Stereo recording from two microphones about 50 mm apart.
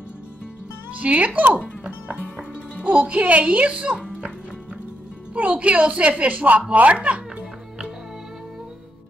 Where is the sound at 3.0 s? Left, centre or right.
Right.